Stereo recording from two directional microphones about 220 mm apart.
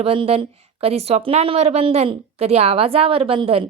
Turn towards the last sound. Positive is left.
turn(degrees=-25)  # may be behind; listen again after turning